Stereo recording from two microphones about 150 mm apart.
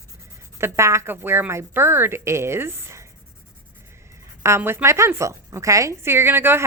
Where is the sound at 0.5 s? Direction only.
15° right (ahead or behind).